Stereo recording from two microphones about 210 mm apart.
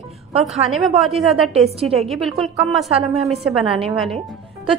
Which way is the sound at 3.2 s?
30° right (ahead or behind).